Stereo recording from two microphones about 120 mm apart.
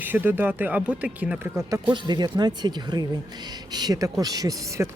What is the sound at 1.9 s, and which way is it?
Speech, 40° right (ahead or behind).